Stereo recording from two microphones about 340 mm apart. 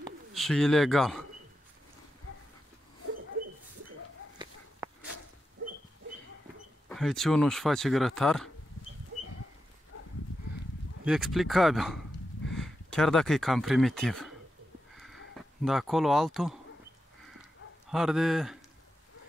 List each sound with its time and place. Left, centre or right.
0.3 s speech: centre
4.8 s a sound: centre
6.9 s speech: centre
9.9 s livestock: left
11.1 s speech: centre
15.6 s speech: centre
17.4 s dog: centre